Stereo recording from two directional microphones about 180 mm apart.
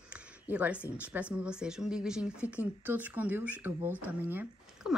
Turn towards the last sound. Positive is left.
turn(degrees=-10)  # may be behind; listen again after turning